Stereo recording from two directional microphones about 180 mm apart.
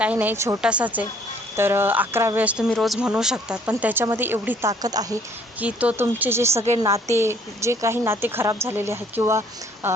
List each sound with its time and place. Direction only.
0.0 s a woman's voice: 10° right (ahead or behind)
4.7 s speech: 20° right (ahead or behind)
5.5 s a woman's voice: 10° right (ahead or behind)